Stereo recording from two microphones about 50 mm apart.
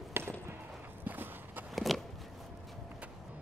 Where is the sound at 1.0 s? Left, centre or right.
Right.